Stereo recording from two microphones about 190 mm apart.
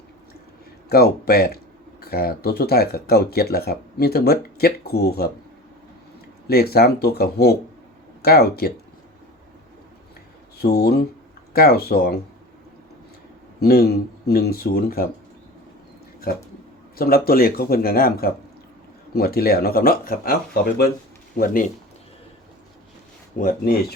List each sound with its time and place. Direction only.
0.9 s speech: 55° left (ahead or behind)
6.5 s speech: 55° left (ahead or behind)
10.6 s speech: 55° left (ahead or behind)
13.6 s speech: 55° left (ahead or behind)
16.3 s speech: 50° left (ahead or behind)
23.4 s speech: 50° left (ahead or behind)